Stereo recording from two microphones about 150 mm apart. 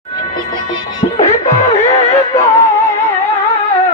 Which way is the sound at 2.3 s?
20° left (ahead or behind).